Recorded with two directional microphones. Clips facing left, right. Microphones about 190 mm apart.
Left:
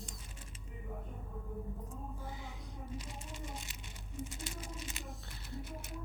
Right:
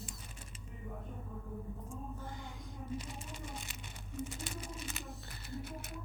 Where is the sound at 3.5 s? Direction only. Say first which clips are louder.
Right 1 dB; 60° right (ahead or behind).